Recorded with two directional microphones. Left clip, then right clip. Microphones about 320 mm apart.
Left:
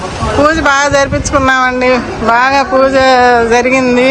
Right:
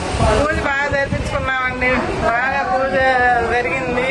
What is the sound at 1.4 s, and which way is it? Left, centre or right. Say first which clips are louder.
A man's voice: left 8 dB; centre.